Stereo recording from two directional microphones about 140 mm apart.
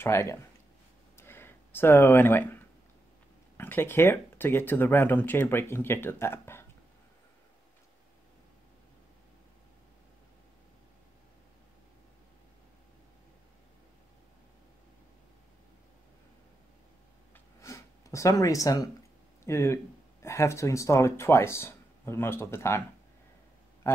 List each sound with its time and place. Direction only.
0.0 s speech: 20° left (ahead or behind)
1.1 s a sound: 15° left (ahead or behind)
3.5 s speech: 15° left (ahead or behind)
17.6 s gasp: 20° left (ahead or behind)
19.4 s speech: 20° left (ahead or behind)